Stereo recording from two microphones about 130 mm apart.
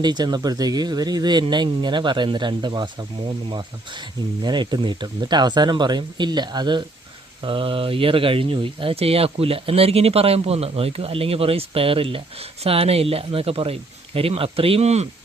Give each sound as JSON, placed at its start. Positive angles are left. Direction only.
{"t": 0.0, "sound": "speech", "side_deg": -35}